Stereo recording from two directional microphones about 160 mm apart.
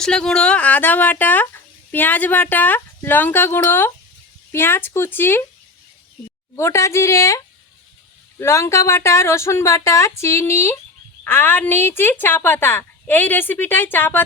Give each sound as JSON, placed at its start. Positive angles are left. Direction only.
{"t": 0.0, "sound": "speech", "side_deg": 5}
{"t": 6.6, "sound": "speech", "side_deg": 15}